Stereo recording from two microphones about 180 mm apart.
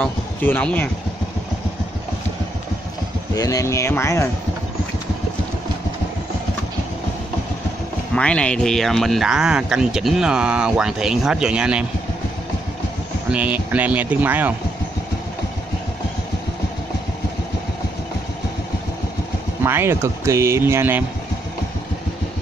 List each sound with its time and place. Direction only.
0.0 s speech: 10° left (ahead or behind)
3.3 s speech: 20° left (ahead or behind)
8.1 s speech: 5° left (ahead or behind)
13.3 s speech: 10° right (ahead or behind)
19.6 s speech: 15° right (ahead or behind)